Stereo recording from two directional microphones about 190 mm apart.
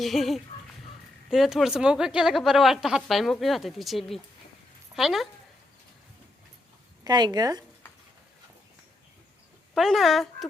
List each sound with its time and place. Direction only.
0.0 s a woman's voice: centre (ahead or behind)
7.0 s speech: 20° right (ahead or behind)
9.7 s a woman's voice: centre (ahead or behind)